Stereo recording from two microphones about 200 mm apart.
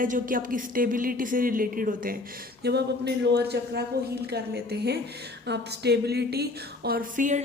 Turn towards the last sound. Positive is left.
turn(degrees=-40)  # may be behind; listen again after turning